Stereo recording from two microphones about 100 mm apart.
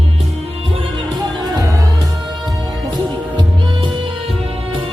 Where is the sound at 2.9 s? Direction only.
50° right (ahead or behind).